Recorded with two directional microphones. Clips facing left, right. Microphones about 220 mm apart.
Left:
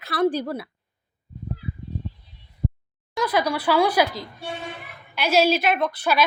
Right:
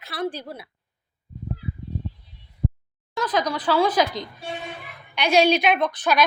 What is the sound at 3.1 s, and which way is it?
A woman's voice, 10° left (ahead or behind).